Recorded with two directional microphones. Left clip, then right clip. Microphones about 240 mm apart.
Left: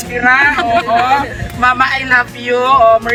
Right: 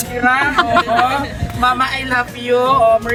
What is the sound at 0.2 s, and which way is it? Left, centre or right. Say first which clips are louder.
Speech: left 4 dB; centre.